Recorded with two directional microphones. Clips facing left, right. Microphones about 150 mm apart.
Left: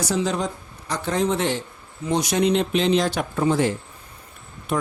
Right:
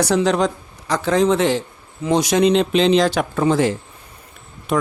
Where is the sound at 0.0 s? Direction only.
70° right (ahead or behind).